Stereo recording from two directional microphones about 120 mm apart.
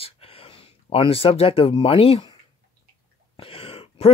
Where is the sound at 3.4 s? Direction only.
50° left (ahead or behind).